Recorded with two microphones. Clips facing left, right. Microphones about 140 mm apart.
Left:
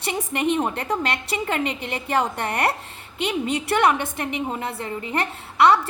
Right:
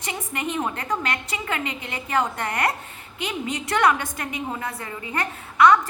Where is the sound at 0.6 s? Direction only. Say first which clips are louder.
Left 2 dB; 30° left (ahead or behind).